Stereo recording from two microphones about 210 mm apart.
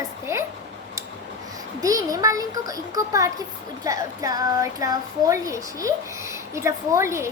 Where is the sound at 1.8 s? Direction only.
15° right (ahead or behind).